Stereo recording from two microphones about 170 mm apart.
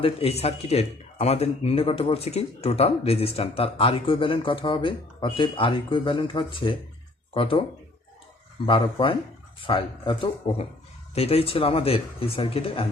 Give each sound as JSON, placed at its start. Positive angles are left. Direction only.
{"t": 0.0, "sound": "speech", "side_deg": 35}
{"t": 8.6, "sound": "speech", "side_deg": 30}